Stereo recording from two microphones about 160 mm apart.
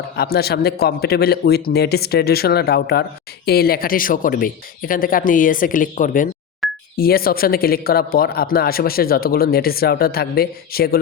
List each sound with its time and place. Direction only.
0.2 s speech: 80° left; by 6.2 s 55° left (ahead or behind)
6.9 s speech: 70° left (ahead or behind)